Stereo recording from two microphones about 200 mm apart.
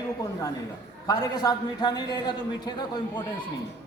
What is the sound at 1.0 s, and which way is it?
A man's voice, 20° left (ahead or behind).